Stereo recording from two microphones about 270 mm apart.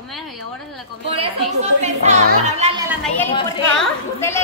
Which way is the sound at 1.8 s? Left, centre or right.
Right.